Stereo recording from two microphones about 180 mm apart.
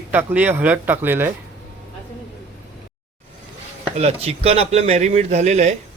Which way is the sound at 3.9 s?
35° right (ahead or behind).